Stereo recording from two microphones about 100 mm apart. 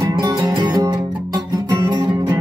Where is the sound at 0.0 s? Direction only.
35° right (ahead or behind).